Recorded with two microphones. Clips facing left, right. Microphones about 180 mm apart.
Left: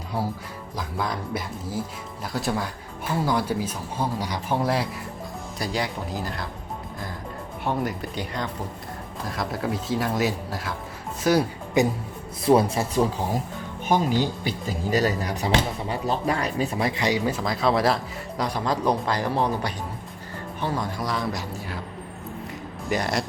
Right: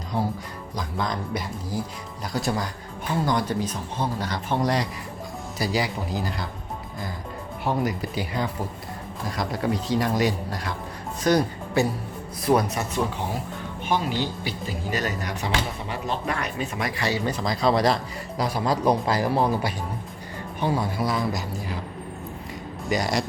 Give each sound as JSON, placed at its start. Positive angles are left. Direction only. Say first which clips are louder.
{"t": 0.8, "sound": "speech", "louder": "right 1 dB", "side_deg": 5}
{"t": 7.6, "sound": "speech", "louder": "right 1 dB", "side_deg": 0}
{"t": 11.8, "sound": "speech", "louder": "left 2 dB", "side_deg": 15}
{"t": 12.5, "sound": "a man's voice", "louder": "left 3 dB", "side_deg": 30}
{"t": 13.8, "sound": "speech", "louder": "left 3 dB", "side_deg": 45}
{"t": 17.0, "sound": "speech", "louder": "left 1 dB", "side_deg": 15}
{"t": 17.4, "sound": "speech", "louder": "right 2 dB", "side_deg": 0}
{"t": 22.9, "sound": "speech", "louder": "right 1 dB", "side_deg": 0}